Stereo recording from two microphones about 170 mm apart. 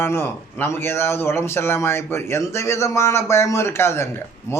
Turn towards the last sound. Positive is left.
turn(degrees=15)  # may be behind; listen again after turning